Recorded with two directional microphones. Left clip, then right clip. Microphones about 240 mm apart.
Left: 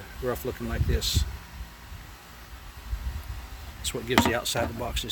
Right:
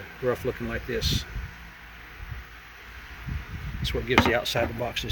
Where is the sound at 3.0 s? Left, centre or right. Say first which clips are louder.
Right 4 dB; left.